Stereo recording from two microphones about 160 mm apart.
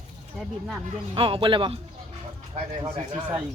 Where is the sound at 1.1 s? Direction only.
35° right (ahead or behind).